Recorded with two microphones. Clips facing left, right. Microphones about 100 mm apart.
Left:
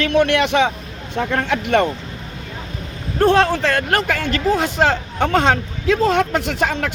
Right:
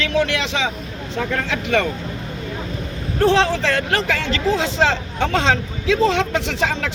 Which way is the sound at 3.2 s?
50° left (ahead or behind).